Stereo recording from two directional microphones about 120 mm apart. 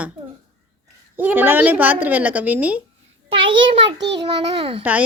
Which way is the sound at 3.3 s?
45° right (ahead or behind).